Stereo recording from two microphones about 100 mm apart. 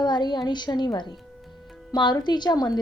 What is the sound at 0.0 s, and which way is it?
A woman's voice, 45° left (ahead or behind).